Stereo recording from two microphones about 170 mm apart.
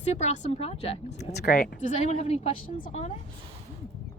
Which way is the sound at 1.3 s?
60° left (ahead or behind).